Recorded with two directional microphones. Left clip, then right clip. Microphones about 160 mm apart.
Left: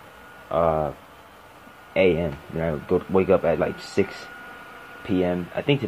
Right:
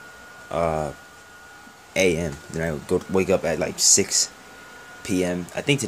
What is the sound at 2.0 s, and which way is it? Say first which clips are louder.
Speech: left 1 dB; 25° right (ahead or behind).